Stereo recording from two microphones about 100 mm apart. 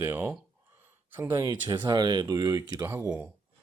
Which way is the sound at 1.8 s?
45° right (ahead or behind).